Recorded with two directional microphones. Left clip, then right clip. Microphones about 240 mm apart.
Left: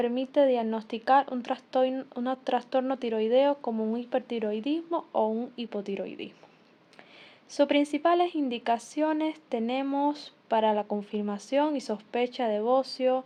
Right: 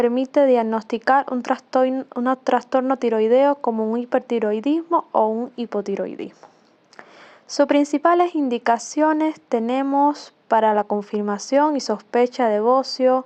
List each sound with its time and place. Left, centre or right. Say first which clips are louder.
0.0 s speech: right 7 dB; right
6.1 s speech: right 8 dB; right
7.5 s speech: right 7 dB; right